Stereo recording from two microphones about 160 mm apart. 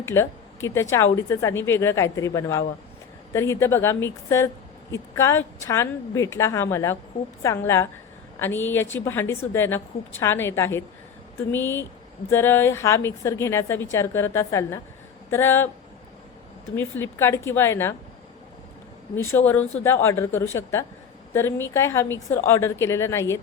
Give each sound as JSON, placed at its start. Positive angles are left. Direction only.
{"t": 0.0, "sound": "a woman's voice", "side_deg": 15}
{"t": 16.7, "sound": "a woman's voice", "side_deg": 15}
{"t": 19.1, "sound": "a woman's voice", "side_deg": 15}